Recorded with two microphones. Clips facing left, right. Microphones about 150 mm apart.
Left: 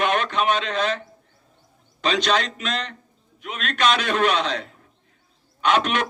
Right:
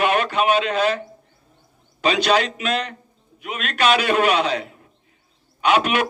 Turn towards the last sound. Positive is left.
turn(degrees=-10)  # may be behind; listen again after turning